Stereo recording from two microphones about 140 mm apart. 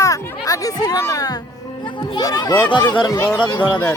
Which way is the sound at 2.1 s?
30° left (ahead or behind).